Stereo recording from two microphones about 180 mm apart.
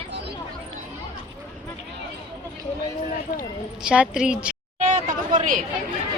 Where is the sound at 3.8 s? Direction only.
5° right (ahead or behind).